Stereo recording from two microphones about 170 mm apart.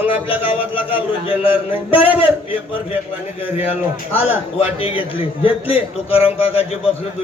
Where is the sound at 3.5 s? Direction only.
10° right (ahead or behind).